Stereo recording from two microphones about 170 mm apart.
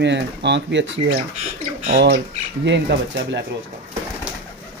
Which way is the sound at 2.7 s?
90° right.